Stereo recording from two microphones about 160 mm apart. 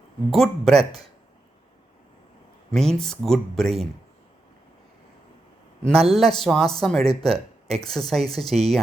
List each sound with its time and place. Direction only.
0.3 s speech: centre (ahead or behind)
2.7 s speech: 5° left (ahead or behind)
6.1 s speech: centre (ahead or behind)